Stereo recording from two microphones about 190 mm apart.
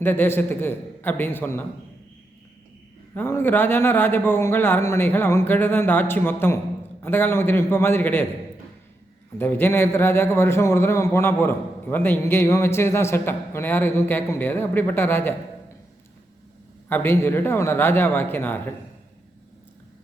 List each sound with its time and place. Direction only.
0.0 s a man's voice: 10° left (ahead or behind)
3.2 s a man's voice: 10° left (ahead or behind)
9.4 s a man's voice: 10° left (ahead or behind)
16.9 s a man's voice: 10° left (ahead or behind)